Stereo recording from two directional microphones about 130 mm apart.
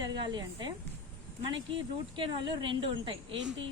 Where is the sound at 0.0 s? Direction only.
35° right (ahead or behind).